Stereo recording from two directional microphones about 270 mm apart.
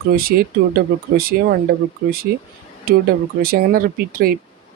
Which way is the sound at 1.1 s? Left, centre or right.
Right.